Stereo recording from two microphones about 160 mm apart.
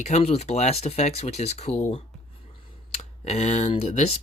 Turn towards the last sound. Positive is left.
turn(degrees=40)  # may be behind; listen again after turning